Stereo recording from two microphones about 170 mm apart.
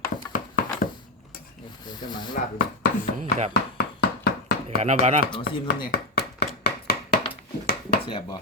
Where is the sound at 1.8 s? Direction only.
25° left (ahead or behind).